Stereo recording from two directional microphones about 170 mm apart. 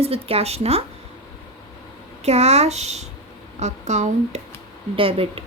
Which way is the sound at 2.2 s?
40° right (ahead or behind).